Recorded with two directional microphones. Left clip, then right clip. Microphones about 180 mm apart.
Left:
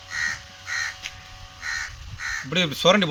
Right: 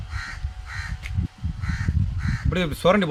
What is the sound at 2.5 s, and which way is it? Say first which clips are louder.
Speech: left 1 dB; 25° right (ahead or behind).